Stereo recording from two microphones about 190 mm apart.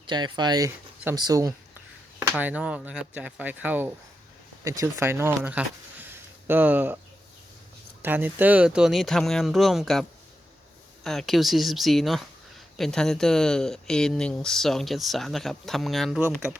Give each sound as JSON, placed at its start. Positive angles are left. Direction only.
{"t": 0.1, "sound": "speech", "side_deg": -25}
{"t": 2.4, "sound": "speech", "side_deg": -5}
{"t": 8.0, "sound": "speech", "side_deg": -10}